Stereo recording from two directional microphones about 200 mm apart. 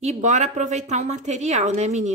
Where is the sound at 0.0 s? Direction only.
35° right (ahead or behind).